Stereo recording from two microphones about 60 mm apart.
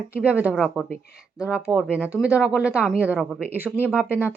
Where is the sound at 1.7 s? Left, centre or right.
Centre.